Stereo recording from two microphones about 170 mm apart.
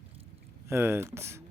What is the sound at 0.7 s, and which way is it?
Speech, 15° right (ahead or behind).